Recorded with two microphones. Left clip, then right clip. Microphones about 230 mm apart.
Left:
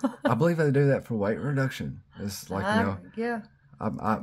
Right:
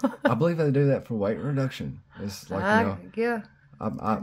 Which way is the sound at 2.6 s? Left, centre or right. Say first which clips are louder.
Right 4 dB; right.